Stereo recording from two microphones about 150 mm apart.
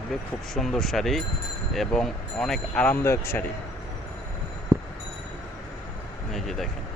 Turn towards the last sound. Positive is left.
turn(degrees=0)  # may be behind; listen again after turning